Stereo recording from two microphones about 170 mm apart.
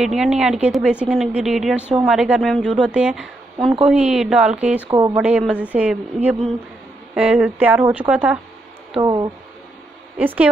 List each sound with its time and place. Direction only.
0.0 s speech: 5° right (ahead or behind)
4.8 s speech: 25° right (ahead or behind)
5.1 s a woman's voice: 5° right (ahead or behind)
9.0 s speech: 25° right (ahead or behind)
10.1 s a woman's voice: 10° right (ahead or behind)